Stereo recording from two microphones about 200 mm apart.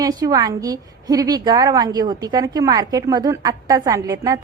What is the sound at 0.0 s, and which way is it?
A woman's voice, 20° right (ahead or behind).